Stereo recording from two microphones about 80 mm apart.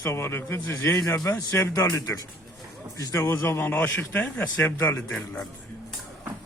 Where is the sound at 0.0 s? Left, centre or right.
Left; by 4.4 s centre.